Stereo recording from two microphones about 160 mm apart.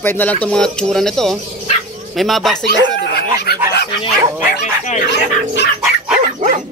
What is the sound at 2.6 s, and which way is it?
Speech, 90° left.